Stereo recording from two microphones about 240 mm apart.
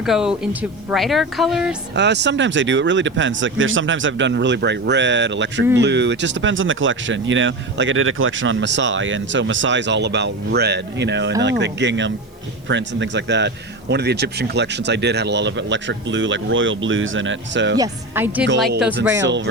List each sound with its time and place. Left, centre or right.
0.0 s speech: centre
2.0 s speech: right
17.7 s speech: centre